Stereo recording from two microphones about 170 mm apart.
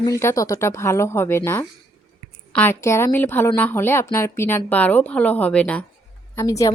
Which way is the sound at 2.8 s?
15° left (ahead or behind).